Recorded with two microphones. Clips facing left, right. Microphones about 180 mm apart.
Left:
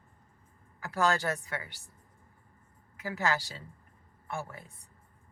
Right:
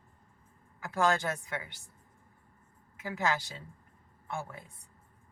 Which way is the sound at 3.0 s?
20° right (ahead or behind).